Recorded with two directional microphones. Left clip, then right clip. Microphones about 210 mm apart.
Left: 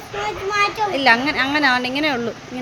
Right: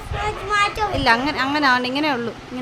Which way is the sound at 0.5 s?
15° right (ahead or behind).